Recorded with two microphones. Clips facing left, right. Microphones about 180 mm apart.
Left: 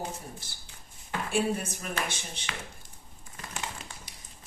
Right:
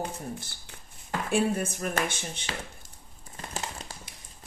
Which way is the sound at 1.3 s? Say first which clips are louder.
Right 3 dB; 50° right (ahead or behind).